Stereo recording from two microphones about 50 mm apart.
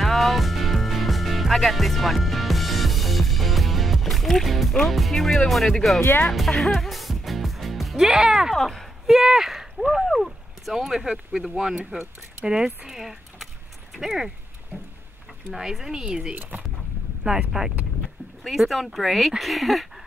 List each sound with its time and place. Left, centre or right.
0.0 s music: centre
4.8 s speech: centre
6.7 s music: centre
8.5 s speech: centre
9.0 s speech: centre
15.5 s speech: centre
16.3 s speech: right
17.2 s speech: centre